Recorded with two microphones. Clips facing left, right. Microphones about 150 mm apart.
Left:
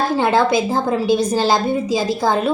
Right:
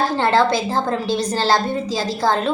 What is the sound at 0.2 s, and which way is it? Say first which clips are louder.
A woman's voice: left 2 dB; 15° left (ahead or behind).